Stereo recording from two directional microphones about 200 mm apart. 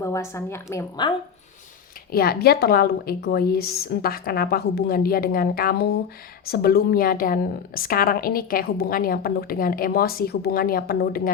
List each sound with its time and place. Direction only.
0.0 s a woman's voice: 15° left (ahead or behind)
2.1 s a woman's voice: 50° left (ahead or behind)